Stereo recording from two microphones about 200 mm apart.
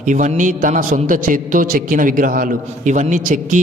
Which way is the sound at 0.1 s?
40° right (ahead or behind).